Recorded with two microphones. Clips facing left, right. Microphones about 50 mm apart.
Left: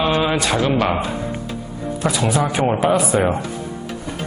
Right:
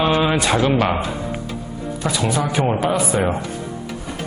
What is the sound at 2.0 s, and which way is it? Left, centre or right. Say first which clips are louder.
Speech: left 2 dB; centre.